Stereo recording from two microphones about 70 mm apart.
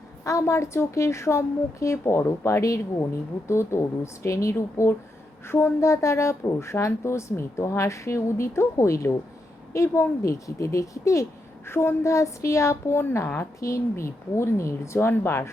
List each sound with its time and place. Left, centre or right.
0.3 s speech: left
13.6 s speech: left